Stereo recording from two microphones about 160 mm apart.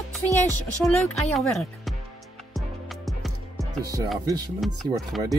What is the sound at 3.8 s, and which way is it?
Speech, 20° right (ahead or behind).